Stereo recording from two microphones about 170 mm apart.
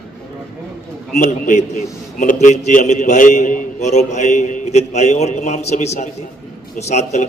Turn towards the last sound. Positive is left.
turn(degrees=40)  # may be behind; listen again after turning